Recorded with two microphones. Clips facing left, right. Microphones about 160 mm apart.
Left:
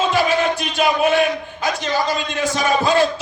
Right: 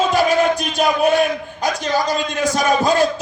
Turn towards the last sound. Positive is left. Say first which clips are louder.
# right 1 dB
turn(degrees=-40)  # may be behind; listen again after turning